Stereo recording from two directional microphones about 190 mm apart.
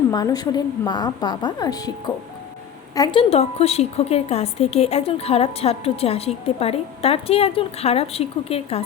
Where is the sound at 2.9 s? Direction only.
20° left (ahead or behind).